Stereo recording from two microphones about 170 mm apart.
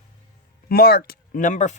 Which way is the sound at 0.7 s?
60° left (ahead or behind).